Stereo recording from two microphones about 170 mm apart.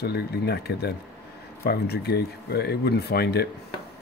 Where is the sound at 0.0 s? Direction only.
70° left (ahead or behind).